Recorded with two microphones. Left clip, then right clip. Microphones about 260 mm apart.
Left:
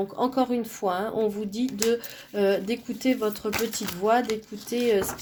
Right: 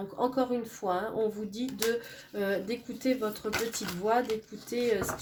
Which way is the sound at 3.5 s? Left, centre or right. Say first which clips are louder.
Left 4 dB; left.